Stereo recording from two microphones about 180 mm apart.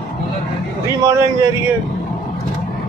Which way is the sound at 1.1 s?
20° right (ahead or behind).